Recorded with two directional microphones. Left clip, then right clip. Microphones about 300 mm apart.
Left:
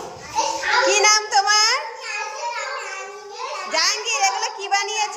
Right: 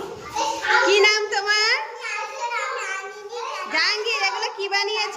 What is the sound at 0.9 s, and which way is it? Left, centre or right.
Child singing, centre.